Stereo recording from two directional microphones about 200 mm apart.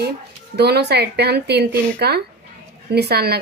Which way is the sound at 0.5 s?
55° right (ahead or behind).